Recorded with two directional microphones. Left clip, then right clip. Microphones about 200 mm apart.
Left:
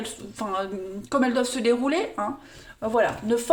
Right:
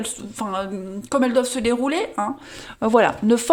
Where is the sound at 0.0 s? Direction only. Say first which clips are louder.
Right 3 dB; 40° right (ahead or behind).